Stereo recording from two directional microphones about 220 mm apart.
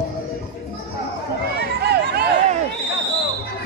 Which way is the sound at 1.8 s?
50° right (ahead or behind).